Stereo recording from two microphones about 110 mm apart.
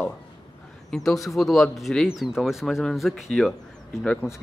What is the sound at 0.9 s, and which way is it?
Speech, 5° left (ahead or behind).